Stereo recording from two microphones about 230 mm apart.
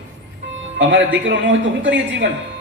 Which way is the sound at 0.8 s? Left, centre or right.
Right.